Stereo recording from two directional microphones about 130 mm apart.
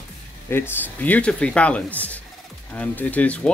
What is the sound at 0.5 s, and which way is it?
Speech, 15° left (ahead or behind).